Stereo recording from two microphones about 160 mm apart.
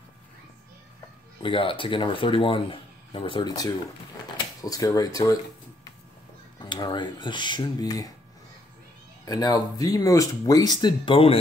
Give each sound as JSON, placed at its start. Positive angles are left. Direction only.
{"t": 1.4, "sound": "speech", "side_deg": 30}
{"t": 6.6, "sound": "speech", "side_deg": 30}
{"t": 9.2, "sound": "speech", "side_deg": 25}